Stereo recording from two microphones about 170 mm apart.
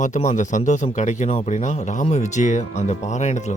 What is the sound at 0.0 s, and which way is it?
Speech, 45° left (ahead or behind).